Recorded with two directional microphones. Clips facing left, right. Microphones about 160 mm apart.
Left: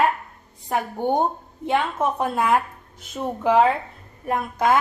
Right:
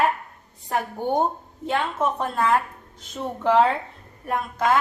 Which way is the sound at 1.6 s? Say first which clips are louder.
Left 2 dB; 15° left (ahead or behind).